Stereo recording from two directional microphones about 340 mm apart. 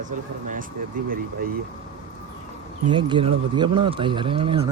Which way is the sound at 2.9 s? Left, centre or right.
Centre.